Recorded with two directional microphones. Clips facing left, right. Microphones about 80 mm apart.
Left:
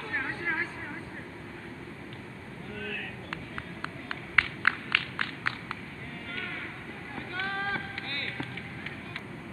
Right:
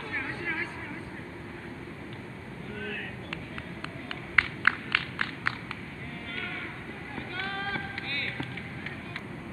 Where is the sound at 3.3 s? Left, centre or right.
Left.